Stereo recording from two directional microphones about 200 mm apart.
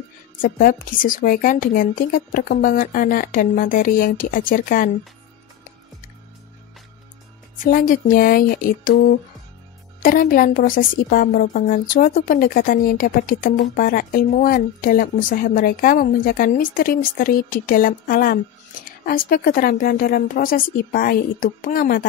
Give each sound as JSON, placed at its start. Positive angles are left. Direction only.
{"t": 0.4, "sound": "a woman's voice", "side_deg": 45}
{"t": 7.6, "sound": "a woman's voice", "side_deg": 45}
{"t": 10.0, "sound": "a woman's voice", "side_deg": 45}